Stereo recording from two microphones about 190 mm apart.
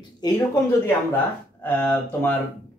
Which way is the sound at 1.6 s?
10° left (ahead or behind).